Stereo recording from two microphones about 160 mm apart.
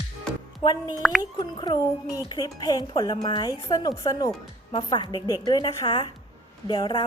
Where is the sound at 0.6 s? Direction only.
25° left (ahead or behind).